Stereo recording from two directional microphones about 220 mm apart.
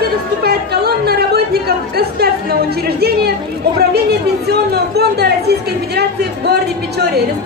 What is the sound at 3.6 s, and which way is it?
A woman's voice, 45° right (ahead or behind).